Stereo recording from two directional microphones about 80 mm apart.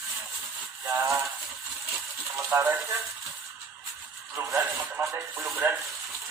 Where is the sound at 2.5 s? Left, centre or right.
Right.